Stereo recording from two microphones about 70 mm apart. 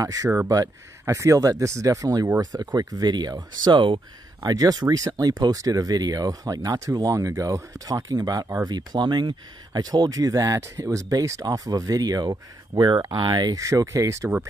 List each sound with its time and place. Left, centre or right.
0.0 s speech: right
2.5 s speech: right
4.4 s speech: right
8.6 s speech: right
13.6 s speech: right